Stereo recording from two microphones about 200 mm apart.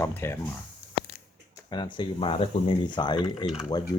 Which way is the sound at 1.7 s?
20° left (ahead or behind).